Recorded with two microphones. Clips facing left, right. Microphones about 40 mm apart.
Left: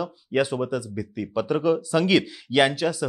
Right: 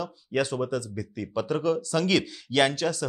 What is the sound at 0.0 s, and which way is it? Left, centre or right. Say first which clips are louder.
Speech: left 4 dB; centre.